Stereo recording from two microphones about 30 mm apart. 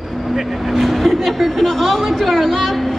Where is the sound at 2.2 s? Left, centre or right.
Centre.